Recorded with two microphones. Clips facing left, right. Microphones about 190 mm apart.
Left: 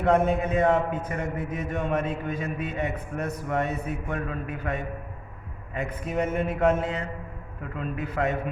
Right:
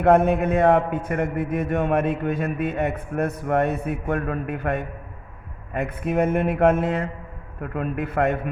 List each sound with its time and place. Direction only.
0.0 s a man's voice: 60° right (ahead or behind)